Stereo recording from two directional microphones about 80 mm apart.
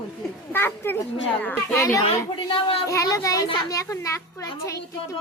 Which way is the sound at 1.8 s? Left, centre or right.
Left.